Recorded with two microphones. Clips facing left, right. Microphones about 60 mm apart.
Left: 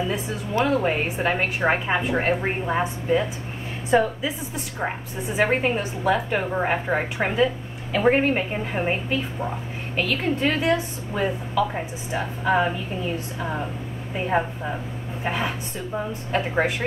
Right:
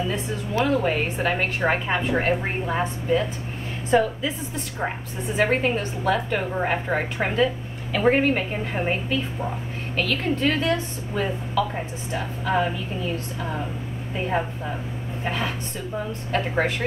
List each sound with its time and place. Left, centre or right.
0.7 s a woman's voice: centre
9.9 s a woman's voice: centre